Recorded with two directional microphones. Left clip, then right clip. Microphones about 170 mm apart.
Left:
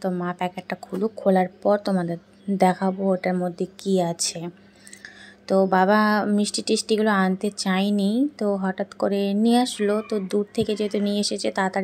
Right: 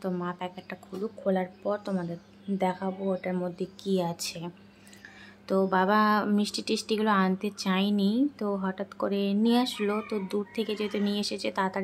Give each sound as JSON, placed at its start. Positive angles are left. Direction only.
{"t": 0.0, "sound": "speech", "side_deg": 25}
{"t": 5.5, "sound": "speech", "side_deg": 25}